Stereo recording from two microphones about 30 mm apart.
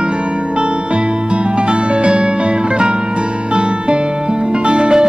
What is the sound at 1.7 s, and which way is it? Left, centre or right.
Music, right.